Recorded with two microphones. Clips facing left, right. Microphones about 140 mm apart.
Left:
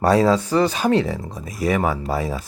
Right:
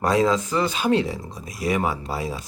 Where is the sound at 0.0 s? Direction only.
35° left (ahead or behind).